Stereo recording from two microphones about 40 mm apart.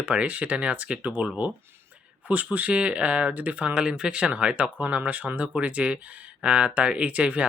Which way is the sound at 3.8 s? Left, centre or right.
Right.